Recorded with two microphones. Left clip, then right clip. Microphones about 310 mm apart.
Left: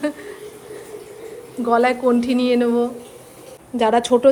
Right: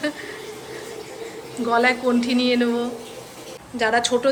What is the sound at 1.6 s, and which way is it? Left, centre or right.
A woman's voice, centre.